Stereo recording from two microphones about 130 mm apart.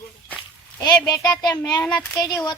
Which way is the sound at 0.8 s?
30° left (ahead or behind).